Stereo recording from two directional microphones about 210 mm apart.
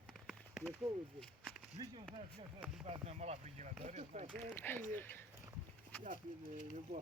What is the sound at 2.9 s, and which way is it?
Speech, 30° right (ahead or behind).